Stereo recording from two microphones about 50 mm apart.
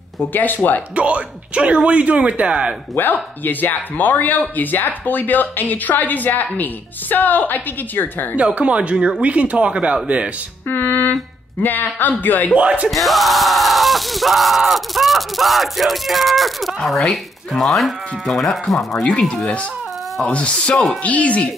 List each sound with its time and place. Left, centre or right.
0.2 s speech: left
0.9 s speech: right
3.0 s speech: left
8.4 s speech: right
10.7 s a sound: left
11.6 s speech: left
12.5 s speech: right
12.9 s a sound: centre
19.1 s speech: centre
20.7 s a sound: centre
21.0 s speech: left